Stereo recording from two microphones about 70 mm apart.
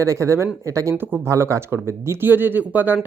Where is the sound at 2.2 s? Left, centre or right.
Right.